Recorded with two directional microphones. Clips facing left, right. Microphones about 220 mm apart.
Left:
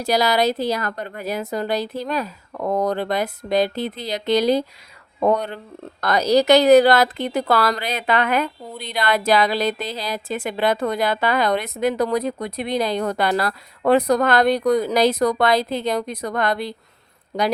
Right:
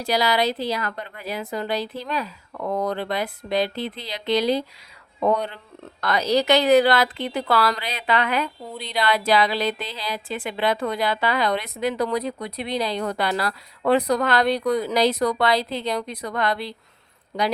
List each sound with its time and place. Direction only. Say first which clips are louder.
0.0 s a woman's voice: left 3 dB; 45° left (ahead or behind)